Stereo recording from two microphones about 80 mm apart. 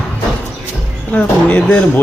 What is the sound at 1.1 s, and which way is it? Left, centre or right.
Speech, centre.